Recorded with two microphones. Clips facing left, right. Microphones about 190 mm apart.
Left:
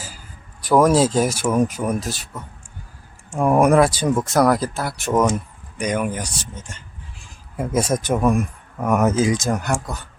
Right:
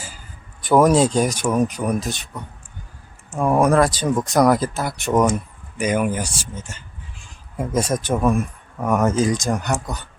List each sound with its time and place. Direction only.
0.6 s speech: centre (ahead or behind)
7.5 s speech: 5° left (ahead or behind)